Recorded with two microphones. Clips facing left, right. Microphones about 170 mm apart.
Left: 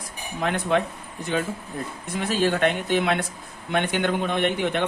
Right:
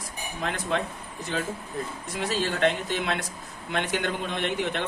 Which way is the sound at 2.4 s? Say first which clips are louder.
Left 4 dB; 55° left (ahead or behind).